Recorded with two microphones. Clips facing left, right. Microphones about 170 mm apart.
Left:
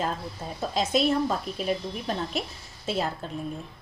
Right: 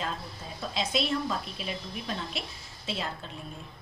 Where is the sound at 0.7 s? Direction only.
45° left (ahead or behind).